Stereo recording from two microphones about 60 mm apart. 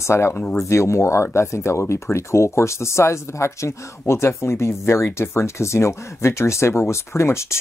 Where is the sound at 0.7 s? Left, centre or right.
Left.